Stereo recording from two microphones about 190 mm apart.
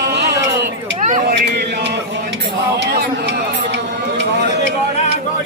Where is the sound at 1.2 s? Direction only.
60° right (ahead or behind).